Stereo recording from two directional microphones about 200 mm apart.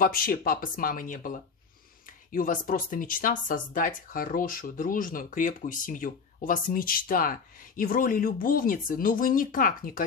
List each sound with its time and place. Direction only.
0.0 s speech: 45° left (ahead or behind)